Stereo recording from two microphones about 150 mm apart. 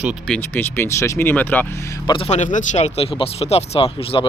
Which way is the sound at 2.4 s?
55° left (ahead or behind).